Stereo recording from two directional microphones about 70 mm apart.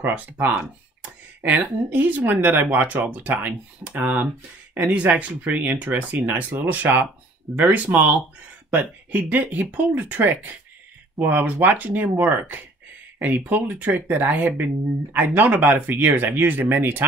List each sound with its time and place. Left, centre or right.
0.0 s speech: right
1.9 s speech: right